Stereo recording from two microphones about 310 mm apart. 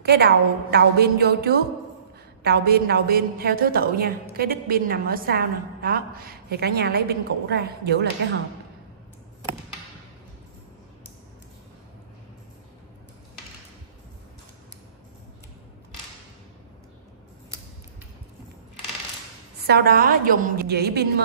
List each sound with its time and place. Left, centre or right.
0.0 s a woman's voice: right
19.6 s a woman's voice: right